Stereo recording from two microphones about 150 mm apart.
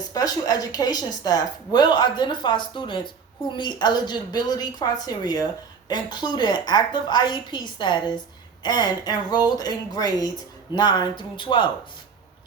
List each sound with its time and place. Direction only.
0.1 s a woman's voice: 25° left (ahead or behind)